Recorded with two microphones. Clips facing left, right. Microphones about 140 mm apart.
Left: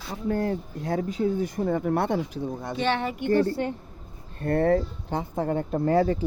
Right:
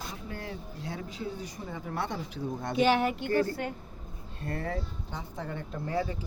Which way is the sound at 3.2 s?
25° left (ahead or behind).